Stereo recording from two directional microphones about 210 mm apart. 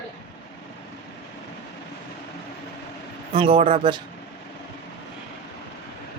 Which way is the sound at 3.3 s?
25° right (ahead or behind).